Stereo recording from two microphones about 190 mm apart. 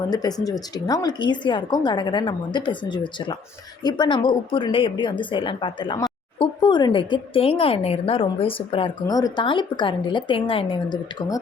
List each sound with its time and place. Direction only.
0.1 s a woman's voice: 20° left (ahead or behind)